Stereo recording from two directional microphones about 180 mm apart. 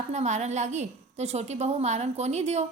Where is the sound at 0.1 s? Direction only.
40° right (ahead or behind).